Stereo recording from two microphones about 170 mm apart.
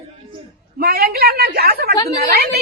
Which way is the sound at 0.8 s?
65° right (ahead or behind).